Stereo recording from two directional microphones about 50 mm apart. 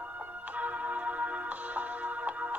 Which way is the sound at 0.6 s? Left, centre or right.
Right.